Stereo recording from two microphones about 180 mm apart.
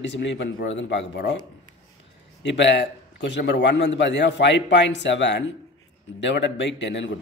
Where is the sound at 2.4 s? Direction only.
80° left.